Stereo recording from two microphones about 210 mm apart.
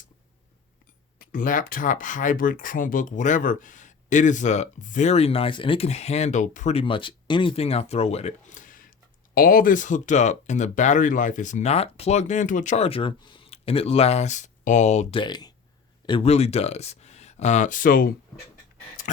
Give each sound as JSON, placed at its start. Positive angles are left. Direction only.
{"t": 1.2, "sound": "speech", "side_deg": 40}